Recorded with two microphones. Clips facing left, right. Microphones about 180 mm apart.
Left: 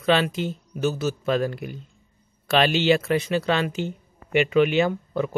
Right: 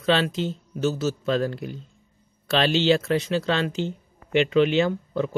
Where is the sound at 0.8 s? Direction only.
55° left (ahead or behind).